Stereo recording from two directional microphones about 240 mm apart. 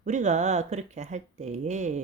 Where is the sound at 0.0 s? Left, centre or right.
Right.